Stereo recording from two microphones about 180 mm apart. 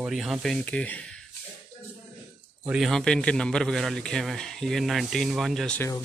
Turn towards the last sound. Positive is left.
turn(degrees=5)  # may be behind; listen again after turning